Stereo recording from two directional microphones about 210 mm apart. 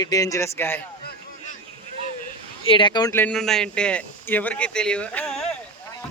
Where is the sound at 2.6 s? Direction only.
25° left (ahead or behind); by 5.5 s 5° left (ahead or behind).